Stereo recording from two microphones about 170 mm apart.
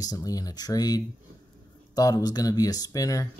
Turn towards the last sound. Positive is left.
turn(degrees=20)  # may be behind; listen again after turning